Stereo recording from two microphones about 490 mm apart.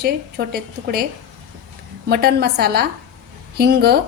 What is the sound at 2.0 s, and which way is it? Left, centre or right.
A woman's voice, centre.